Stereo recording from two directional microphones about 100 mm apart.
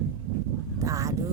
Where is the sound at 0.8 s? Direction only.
35° right (ahead or behind).